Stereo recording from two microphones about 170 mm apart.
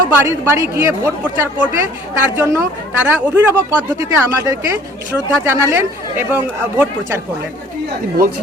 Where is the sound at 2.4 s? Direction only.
15° right (ahead or behind).